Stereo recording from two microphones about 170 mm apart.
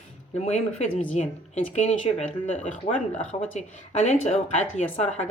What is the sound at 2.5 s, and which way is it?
Speech, 45° left (ahead or behind).